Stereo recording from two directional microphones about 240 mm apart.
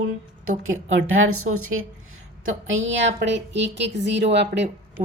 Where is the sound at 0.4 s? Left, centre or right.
Right.